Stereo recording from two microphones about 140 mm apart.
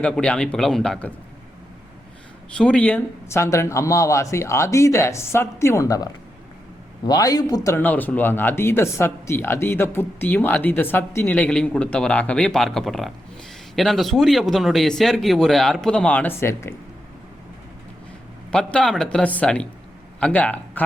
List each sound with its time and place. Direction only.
0.0 s speech: 10° left (ahead or behind)
2.6 s speech: 10° left (ahead or behind); by 7.8 s 25° left (ahead or behind)
7.8 s speech: 10° left (ahead or behind)
18.5 s speech: 5° left (ahead or behind)